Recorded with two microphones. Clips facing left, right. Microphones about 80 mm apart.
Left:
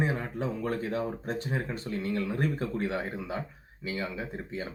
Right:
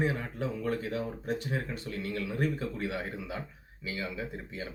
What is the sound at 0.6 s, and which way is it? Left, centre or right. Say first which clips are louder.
Speech: left 2 dB; left.